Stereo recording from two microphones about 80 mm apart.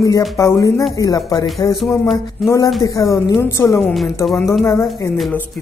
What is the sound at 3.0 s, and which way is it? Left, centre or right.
Speech, left.